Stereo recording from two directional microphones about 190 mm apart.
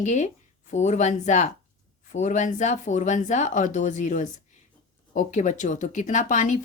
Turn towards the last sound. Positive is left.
turn(degrees=40)  # may be behind; listen again after turning